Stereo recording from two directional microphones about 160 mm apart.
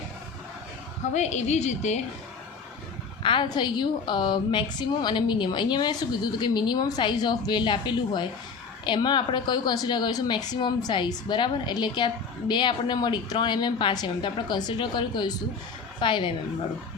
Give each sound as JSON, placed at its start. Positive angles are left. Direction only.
{"t": 1.1, "sound": "a woman's voice", "side_deg": 45}
{"t": 3.2, "sound": "a woman's voice", "side_deg": 30}